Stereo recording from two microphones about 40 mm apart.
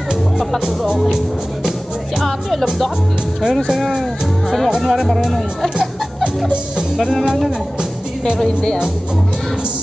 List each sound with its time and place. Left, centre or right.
0.9 s music: centre
3.6 s speech: centre